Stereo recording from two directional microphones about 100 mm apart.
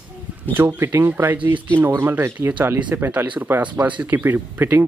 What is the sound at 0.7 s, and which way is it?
Speech, 20° right (ahead or behind).